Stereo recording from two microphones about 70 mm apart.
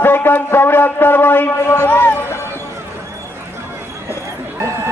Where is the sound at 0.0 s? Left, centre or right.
Left.